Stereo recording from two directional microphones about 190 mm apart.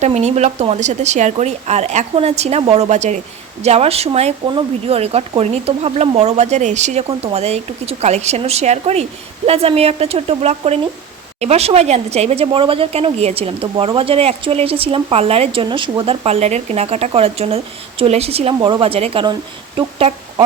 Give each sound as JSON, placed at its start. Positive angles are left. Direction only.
{"t": 0.0, "sound": "a woman's voice", "side_deg": -35}